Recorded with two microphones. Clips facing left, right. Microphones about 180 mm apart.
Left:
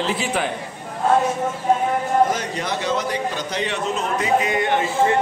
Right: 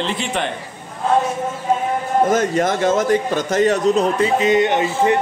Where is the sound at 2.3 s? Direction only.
50° right (ahead or behind).